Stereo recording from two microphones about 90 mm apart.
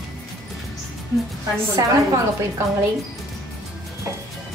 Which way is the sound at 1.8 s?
45° right (ahead or behind).